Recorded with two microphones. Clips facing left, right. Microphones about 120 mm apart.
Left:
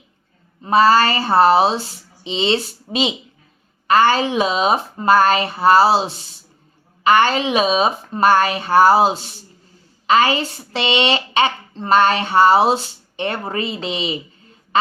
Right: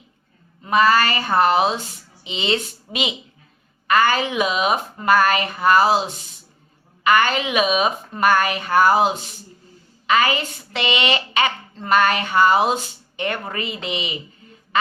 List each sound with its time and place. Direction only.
0.6 s a woman's voice: 30° left (ahead or behind)